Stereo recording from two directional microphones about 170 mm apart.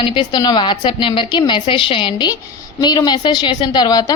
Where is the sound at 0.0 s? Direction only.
25° left (ahead or behind).